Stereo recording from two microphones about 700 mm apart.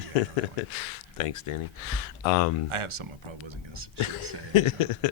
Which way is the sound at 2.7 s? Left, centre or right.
Right.